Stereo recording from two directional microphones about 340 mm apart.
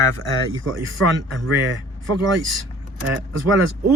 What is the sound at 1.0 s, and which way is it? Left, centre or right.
Speech, right.